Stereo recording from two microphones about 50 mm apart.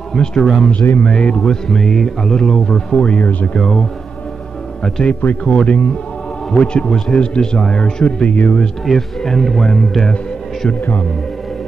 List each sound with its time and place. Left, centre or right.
0.1 s speech: centre
0.4 s speech: centre
1.0 s a man's voice: centre
1.4 s speech: centre
3.2 s speech: left
3.5 s speech: centre
4.8 s speech: centre
5.2 s a man's voice: left
8.8 s speech: centre